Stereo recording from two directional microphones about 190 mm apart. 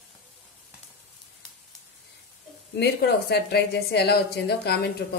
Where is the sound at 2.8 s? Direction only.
60° left (ahead or behind).